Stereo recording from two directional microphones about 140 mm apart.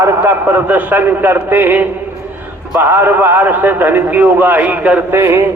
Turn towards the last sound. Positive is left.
turn(degrees=-15)  # may be behind; listen again after turning